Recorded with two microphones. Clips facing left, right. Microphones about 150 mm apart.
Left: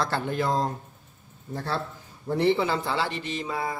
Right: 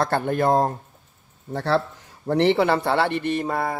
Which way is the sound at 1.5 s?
75° right (ahead or behind).